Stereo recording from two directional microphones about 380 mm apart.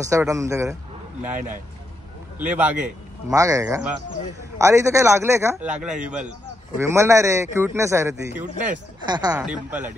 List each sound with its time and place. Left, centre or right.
0.0 s a man's voice: centre